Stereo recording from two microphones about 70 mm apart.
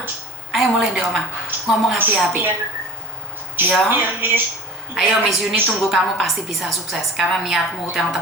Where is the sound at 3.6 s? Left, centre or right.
Right.